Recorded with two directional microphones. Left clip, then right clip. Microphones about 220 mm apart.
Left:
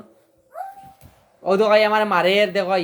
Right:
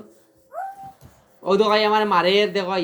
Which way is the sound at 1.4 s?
30° left (ahead or behind).